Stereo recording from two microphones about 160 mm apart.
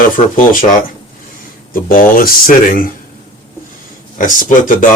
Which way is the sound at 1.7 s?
65° left (ahead or behind).